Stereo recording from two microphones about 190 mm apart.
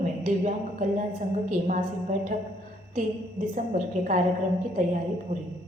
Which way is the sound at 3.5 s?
40° right (ahead or behind).